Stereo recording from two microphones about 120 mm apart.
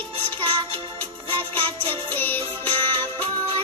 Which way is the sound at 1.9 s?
15° left (ahead or behind).